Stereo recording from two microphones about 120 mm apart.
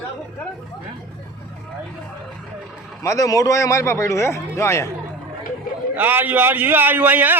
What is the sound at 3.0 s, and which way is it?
A man's voice, 25° left (ahead or behind).